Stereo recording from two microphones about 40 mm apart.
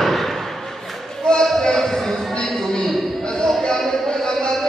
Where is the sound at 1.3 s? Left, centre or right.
Left.